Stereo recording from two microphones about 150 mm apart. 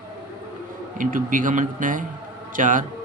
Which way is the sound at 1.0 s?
65° right (ahead or behind).